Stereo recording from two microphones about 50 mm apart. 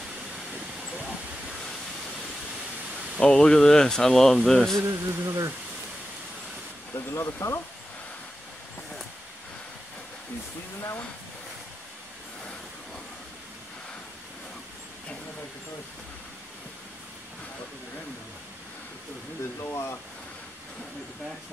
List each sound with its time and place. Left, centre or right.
3.2 s speech: centre
4.8 s speech: right
7.0 s speech: left
19.6 s speech: left